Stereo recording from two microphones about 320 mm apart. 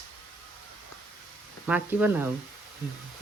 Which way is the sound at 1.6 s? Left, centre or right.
Centre.